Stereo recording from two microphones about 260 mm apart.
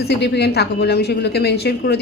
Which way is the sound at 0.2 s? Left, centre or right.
Left.